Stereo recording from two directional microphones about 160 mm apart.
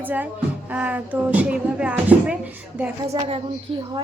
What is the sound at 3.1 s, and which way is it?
Speech, 35° right (ahead or behind).